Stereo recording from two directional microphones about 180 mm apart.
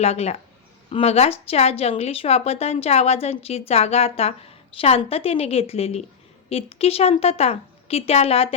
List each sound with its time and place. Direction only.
0.0 s speech: 35° left (ahead or behind)